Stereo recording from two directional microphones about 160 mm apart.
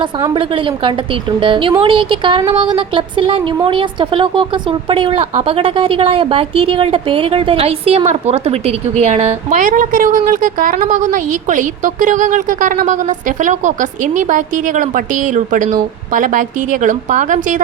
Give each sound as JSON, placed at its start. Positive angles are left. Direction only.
{"t": 0.3, "sound": "a woman's voice", "side_deg": -35}